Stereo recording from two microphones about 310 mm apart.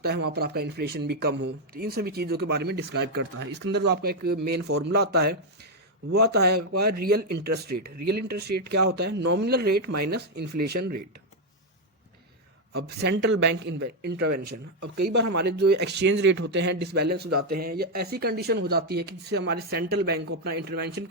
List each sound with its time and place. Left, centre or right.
0.0 s speech: right
4.9 s speech: right
6.1 s speech: right
12.7 s speech: right
15.1 s speech: right
15.4 s speech: right
17.2 s speech: right
17.6 s speech: right